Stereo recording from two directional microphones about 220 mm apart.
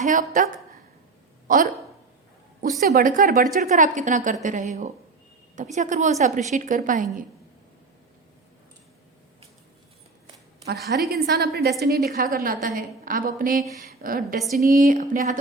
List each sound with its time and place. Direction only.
0.0 s a woman's voice: 35° right (ahead or behind)
2.8 s a woman's voice: 40° right (ahead or behind)
11.1 s a woman's voice: 45° right (ahead or behind)